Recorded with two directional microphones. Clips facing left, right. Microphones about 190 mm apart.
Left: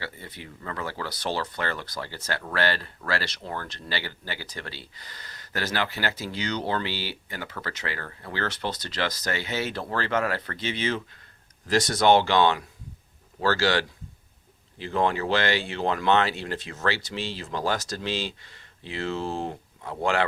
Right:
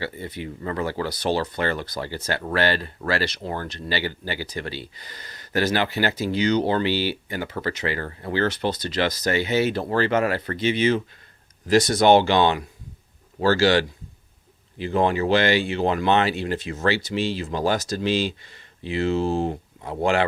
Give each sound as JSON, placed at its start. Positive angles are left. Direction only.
{"t": 0.0, "sound": "speech", "side_deg": -15}